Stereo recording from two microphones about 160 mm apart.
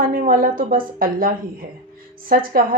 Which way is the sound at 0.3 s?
60° right (ahead or behind).